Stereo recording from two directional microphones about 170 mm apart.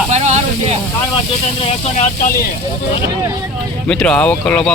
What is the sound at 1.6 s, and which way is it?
Speech, 40° left (ahead or behind).